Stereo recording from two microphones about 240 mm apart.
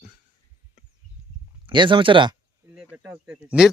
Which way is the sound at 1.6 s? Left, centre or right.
Centre.